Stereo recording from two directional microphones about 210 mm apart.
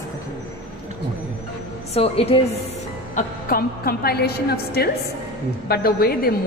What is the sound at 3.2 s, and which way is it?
A woman's voice, 45° left (ahead or behind).